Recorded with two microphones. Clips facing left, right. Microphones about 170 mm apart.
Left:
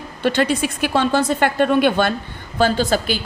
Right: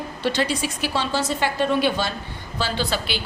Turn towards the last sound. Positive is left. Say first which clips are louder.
# left 6 dB
turn(degrees=45)  # may be behind; listen again after turning